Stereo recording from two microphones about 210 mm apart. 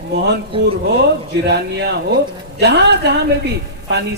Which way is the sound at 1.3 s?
55° right (ahead or behind).